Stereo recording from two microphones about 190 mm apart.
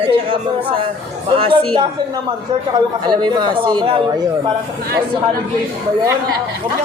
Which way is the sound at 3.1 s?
25° right (ahead or behind).